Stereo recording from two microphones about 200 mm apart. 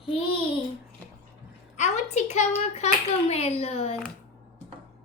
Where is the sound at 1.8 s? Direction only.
35° left (ahead or behind).